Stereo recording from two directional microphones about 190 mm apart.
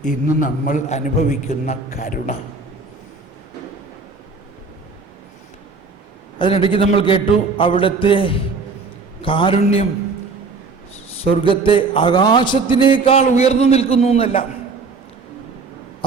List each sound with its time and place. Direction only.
0.0 s a man's voice: 45° left (ahead or behind)
6.4 s a man's voice: 25° left (ahead or behind)
11.2 s a man's voice: 25° left (ahead or behind)